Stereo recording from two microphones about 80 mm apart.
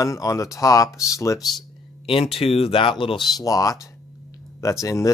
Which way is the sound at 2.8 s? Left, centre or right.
Left.